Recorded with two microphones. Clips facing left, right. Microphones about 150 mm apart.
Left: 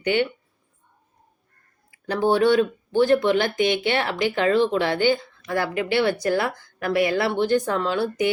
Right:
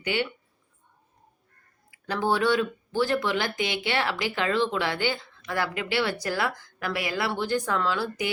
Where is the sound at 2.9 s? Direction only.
55° left (ahead or behind).